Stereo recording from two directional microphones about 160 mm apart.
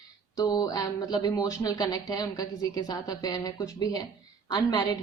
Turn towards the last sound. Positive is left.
turn(degrees=25)  # may be behind; listen again after turning